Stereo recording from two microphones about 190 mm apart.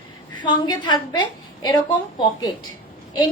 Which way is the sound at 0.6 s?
20° left (ahead or behind).